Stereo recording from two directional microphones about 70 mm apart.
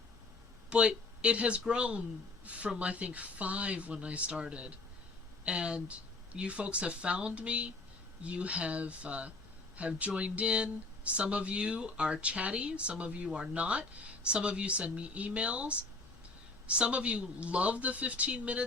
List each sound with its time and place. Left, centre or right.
0.7 s speech: centre